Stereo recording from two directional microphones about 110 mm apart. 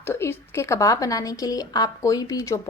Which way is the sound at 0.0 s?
25° left (ahead or behind).